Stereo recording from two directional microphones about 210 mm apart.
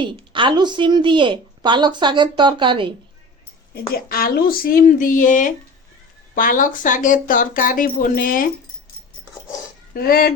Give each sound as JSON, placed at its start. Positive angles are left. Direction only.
{"t": 0.0, "sound": "a woman's voice", "side_deg": -25}
{"t": 3.9, "sound": "speech", "side_deg": 45}
{"t": 9.9, "sound": "speech", "side_deg": 45}